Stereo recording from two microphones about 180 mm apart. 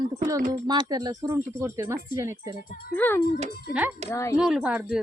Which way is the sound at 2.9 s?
10° left (ahead or behind).